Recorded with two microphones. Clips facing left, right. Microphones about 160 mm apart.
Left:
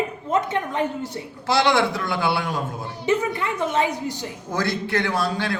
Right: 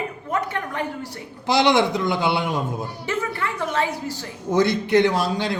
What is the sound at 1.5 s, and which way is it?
A man's voice, 20° right (ahead or behind).